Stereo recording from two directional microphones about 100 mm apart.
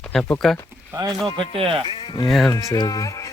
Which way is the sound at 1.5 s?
65° right (ahead or behind).